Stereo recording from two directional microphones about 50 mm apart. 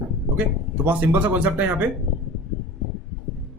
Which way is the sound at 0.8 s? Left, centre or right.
Right.